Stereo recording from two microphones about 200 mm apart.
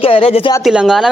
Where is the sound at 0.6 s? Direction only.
5° right (ahead or behind).